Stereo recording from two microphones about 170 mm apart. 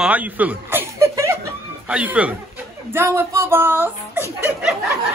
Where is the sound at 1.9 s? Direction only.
10° right (ahead or behind).